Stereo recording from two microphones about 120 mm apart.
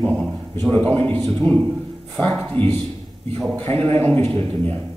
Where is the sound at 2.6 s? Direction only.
40° right (ahead or behind).